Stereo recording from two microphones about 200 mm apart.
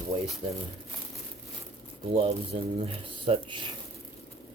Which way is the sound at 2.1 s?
25° right (ahead or behind).